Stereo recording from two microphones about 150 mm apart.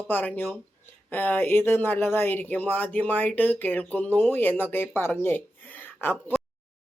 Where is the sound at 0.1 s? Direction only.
10° left (ahead or behind).